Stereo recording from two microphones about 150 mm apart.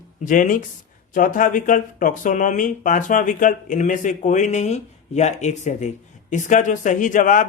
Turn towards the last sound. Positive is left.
turn(degrees=60)  # may be behind; listen again after turning